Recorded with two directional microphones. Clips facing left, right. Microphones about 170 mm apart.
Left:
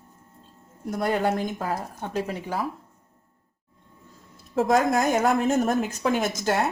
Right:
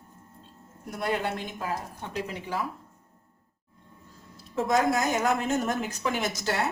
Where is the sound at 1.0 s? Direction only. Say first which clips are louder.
Left 5 dB; 45° left (ahead or behind).